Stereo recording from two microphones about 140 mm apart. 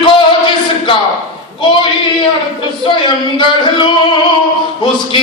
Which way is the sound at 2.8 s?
35° left (ahead or behind).